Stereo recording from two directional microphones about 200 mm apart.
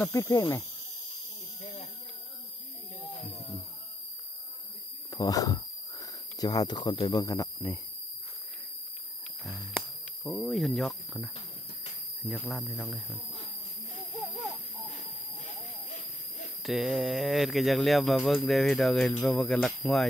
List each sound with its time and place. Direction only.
0.0 s speech: 15° left (ahead or behind)
1.6 s a sound: 30° left (ahead or behind)
3.3 s music: centre (ahead or behind)
5.1 s speech: 20° left (ahead or behind)
10.2 s speech: centre (ahead or behind)
12.3 s speech: centre (ahead or behind)
14.2 s a sound: centre (ahead or behind)
16.6 s speech: centre (ahead or behind)